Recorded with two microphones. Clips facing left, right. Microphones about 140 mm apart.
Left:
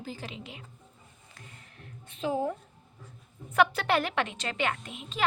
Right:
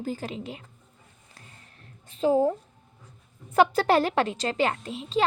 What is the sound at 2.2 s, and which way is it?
Speech, 35° right (ahead or behind).